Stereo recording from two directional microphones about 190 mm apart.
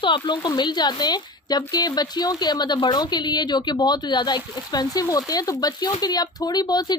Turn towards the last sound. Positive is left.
turn(degrees=20)  # may be behind; listen again after turning